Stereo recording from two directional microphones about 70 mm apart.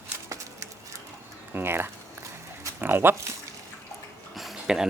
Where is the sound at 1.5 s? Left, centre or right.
Right.